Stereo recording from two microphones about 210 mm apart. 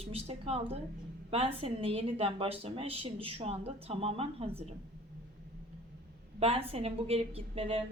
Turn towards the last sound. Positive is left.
turn(degrees=-25)  # may be behind; listen again after turning